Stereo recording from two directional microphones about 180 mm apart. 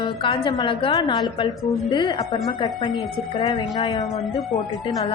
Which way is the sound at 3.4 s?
25° left (ahead or behind).